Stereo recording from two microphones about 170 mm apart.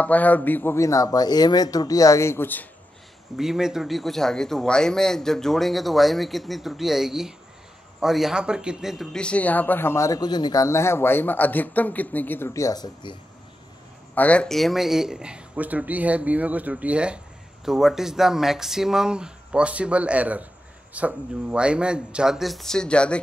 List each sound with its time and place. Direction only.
0.0 s speech: 10° left (ahead or behind)
3.3 s a man's voice: 5° right (ahead or behind); by 13.2 s 25° left (ahead or behind)
14.1 s a man's voice: 10° left (ahead or behind)